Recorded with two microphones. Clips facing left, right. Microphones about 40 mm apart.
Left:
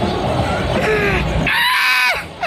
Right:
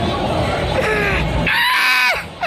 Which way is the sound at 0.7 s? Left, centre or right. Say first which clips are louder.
Left 2 dB; centre.